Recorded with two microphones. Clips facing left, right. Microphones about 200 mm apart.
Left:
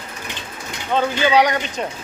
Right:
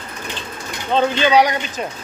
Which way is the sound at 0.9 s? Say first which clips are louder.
Right 2 dB; 20° right (ahead or behind).